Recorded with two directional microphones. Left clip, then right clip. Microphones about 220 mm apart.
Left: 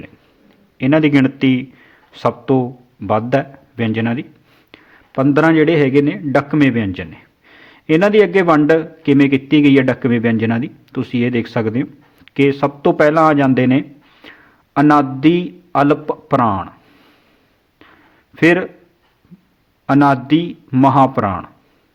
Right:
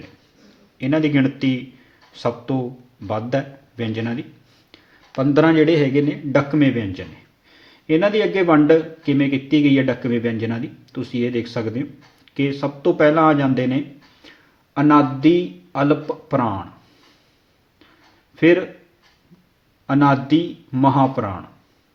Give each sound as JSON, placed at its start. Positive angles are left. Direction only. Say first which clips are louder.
{"t": 0.8, "sound": "a man's voice", "louder": "left 6 dB", "side_deg": 30}
{"t": 18.3, "sound": "a man's voice", "louder": "left 2 dB", "side_deg": 40}
{"t": 19.9, "sound": "a man's voice", "louder": "left 4 dB", "side_deg": 40}